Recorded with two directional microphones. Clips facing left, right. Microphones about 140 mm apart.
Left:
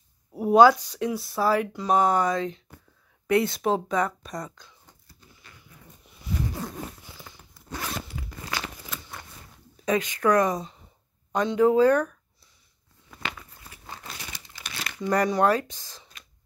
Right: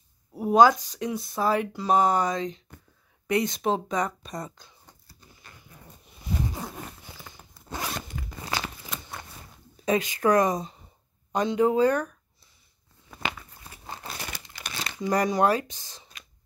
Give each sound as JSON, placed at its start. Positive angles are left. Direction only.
{"t": 0.3, "sound": "a sound", "side_deg": 10}
{"t": 0.7, "sound": "speech", "side_deg": -15}
{"t": 1.8, "sound": "speech", "side_deg": 0}
{"t": 2.0, "sound": "speech", "side_deg": -20}
{"t": 4.6, "sound": "a sound", "side_deg": -35}
{"t": 6.3, "sound": "zipper", "side_deg": -20}
{"t": 7.9, "sound": "zipper", "side_deg": 5}
{"t": 8.3, "sound": "crumpling", "side_deg": -20}
{"t": 9.8, "sound": "speech", "side_deg": -30}
{"t": 10.4, "sound": "speech", "side_deg": -15}
{"t": 13.1, "sound": "a sound", "side_deg": -25}
{"t": 14.1, "sound": "crumpling", "side_deg": -55}
{"t": 15.0, "sound": "speech", "side_deg": -15}
{"t": 16.0, "sound": "whispering", "side_deg": -5}